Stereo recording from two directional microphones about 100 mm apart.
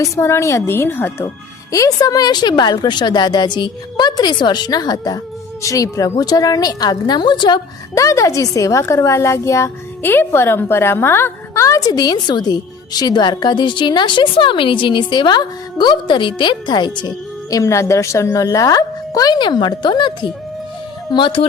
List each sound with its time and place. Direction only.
0.0 s a woman's voice: 30° left (ahead or behind)
1.7 s a woman's voice: 35° left (ahead or behind)
7.9 s a woman's voice: 30° left (ahead or behind); by 17.1 s 50° left (ahead or behind)
17.5 s a woman's voice: 30° left (ahead or behind); by 21.4 s 55° left (ahead or behind)